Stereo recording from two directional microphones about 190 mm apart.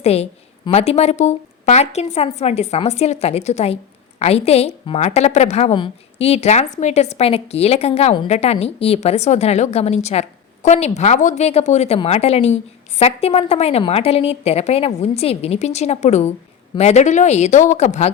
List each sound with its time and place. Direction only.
0.0 s a woman's voice: 35° left (ahead or behind)